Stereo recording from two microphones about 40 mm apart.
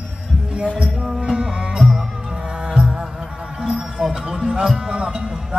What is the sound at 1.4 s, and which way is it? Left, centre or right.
Music, centre.